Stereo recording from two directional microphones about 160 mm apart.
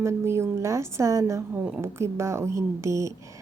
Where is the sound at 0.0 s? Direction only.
15° right (ahead or behind).